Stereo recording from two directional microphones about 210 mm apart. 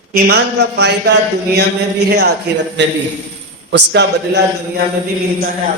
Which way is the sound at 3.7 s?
55° right (ahead or behind).